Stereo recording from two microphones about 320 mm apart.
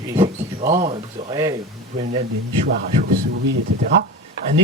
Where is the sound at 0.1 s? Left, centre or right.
Centre.